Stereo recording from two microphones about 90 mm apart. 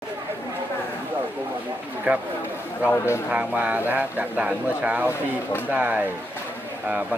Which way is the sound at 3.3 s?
15° right (ahead or behind).